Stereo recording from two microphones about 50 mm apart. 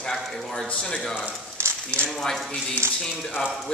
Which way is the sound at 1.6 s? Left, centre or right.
Right.